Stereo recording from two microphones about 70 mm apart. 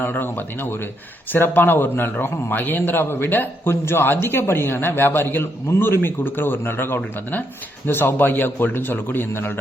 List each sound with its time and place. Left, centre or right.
0.0 s a man's voice: left